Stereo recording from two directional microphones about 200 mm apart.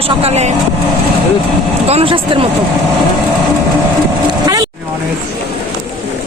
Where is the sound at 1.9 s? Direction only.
30° right (ahead or behind).